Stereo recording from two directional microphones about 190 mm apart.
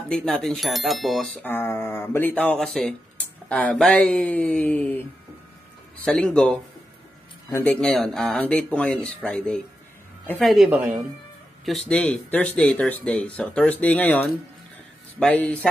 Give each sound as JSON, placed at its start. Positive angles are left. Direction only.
{"t": 0.1, "sound": "speech", "side_deg": 5}
{"t": 6.0, "sound": "speech", "side_deg": 5}